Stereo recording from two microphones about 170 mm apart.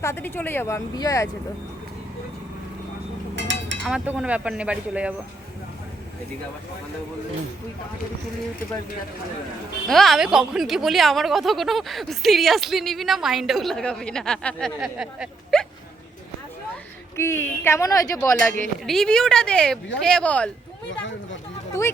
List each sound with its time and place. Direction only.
0.0 s speech: 15° left (ahead or behind)
3.3 s a sound: 90° right
3.8 s speech: 10° right (ahead or behind)
9.8 s speech: centre (ahead or behind)
17.2 s speech: 15° left (ahead or behind)
18.9 s speech: 5° left (ahead or behind)
21.0 s a sound: 90° left
21.7 s speech: 15° left (ahead or behind)